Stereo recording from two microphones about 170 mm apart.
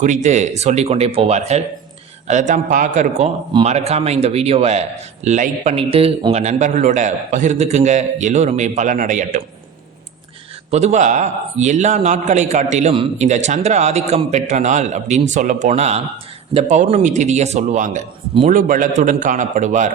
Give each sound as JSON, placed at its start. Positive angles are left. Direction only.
{"t": 0.0, "sound": "a man's voice", "side_deg": -45}
{"t": 10.7, "sound": "a man's voice", "side_deg": -40}